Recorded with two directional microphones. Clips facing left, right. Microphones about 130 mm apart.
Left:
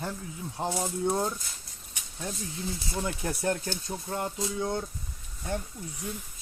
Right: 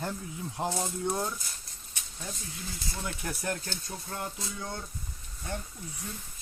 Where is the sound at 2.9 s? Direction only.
25° left (ahead or behind).